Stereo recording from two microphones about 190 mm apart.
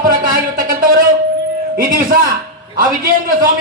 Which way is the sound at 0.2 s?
45° right (ahead or behind).